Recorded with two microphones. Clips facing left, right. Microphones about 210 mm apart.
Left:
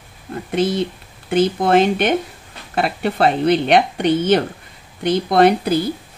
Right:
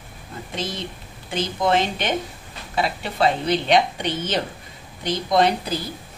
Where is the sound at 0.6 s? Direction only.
60° left (ahead or behind).